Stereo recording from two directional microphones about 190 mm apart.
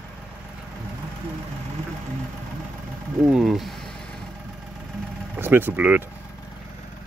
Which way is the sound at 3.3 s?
Centre (ahead or behind).